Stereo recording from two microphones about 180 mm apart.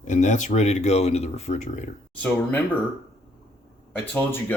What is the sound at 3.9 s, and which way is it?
Speech, 10° left (ahead or behind).